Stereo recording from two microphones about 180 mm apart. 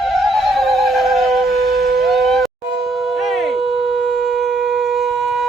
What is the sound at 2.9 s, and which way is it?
Shofar, centre (ahead or behind).